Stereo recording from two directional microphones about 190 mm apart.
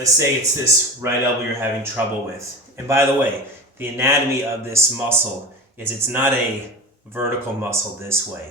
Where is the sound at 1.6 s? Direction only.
10° right (ahead or behind).